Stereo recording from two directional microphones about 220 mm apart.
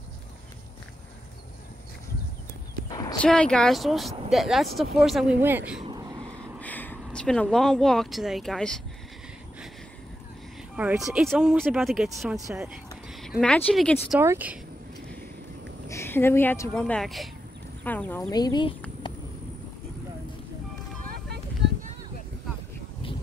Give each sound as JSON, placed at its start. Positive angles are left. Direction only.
{"t": 2.9, "sound": "horse", "side_deg": 15}
{"t": 3.2, "sound": "speech", "side_deg": 5}
{"t": 5.8, "sound": "a sound", "side_deg": -20}
{"t": 6.6, "sound": "speech", "side_deg": 10}
{"t": 10.8, "sound": "speech", "side_deg": -5}
{"t": 13.4, "sound": "speech", "side_deg": 5}
{"t": 14.1, "sound": "speech", "side_deg": -10}
{"t": 15.9, "sound": "speech", "side_deg": 10}
{"t": 18.3, "sound": "speech", "side_deg": 20}
{"t": 21.0, "sound": "music", "side_deg": -40}
{"t": 21.6, "sound": "a sound", "side_deg": -50}